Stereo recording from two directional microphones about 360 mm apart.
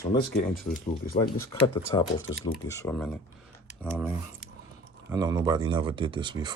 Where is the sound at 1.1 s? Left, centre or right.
Centre.